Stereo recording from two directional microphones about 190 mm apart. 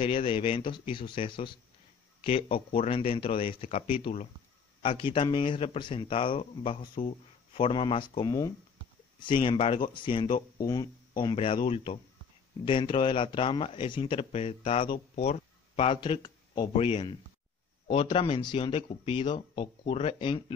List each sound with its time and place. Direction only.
0.0 s speech: 30° left (ahead or behind)